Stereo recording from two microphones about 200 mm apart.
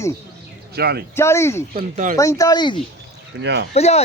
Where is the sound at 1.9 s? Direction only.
40° right (ahead or behind).